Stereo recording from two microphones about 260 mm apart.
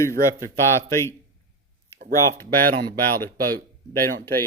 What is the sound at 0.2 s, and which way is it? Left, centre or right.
Speech, centre.